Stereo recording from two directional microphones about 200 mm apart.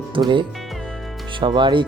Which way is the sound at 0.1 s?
25° right (ahead or behind).